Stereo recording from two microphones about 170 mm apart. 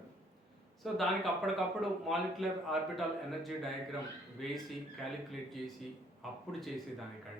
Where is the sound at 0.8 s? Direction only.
Centre (ahead or behind).